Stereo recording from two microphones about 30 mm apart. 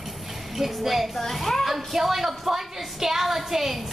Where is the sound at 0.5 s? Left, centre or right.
Centre.